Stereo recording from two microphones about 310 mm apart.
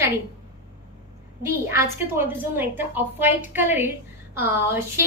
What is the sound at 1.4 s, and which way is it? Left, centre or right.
A woman's voice, centre.